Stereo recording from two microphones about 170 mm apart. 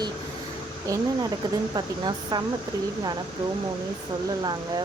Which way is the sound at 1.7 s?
25° right (ahead or behind).